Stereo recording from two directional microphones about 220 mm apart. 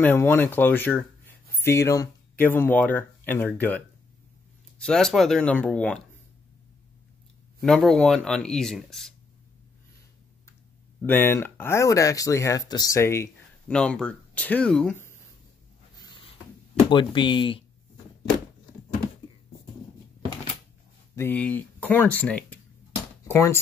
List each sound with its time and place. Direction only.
0.0 s speech: 10° left (ahead or behind)
7.6 s speech: centre (ahead or behind)
11.1 s speech: 10° left (ahead or behind)
16.9 s speech: 20° left (ahead or behind)
21.1 s speech: 10° left (ahead or behind)